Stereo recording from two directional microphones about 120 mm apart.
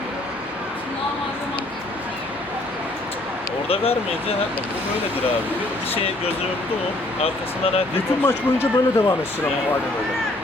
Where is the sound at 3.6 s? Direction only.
55° left (ahead or behind).